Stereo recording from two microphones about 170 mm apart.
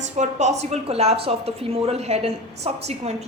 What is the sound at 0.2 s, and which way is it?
A woman's voice, 45° right (ahead or behind).